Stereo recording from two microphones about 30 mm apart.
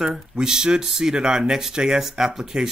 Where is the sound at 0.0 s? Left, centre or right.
Centre.